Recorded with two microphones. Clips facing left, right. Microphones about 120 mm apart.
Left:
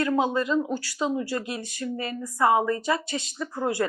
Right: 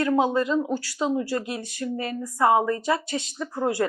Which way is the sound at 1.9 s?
30° right (ahead or behind).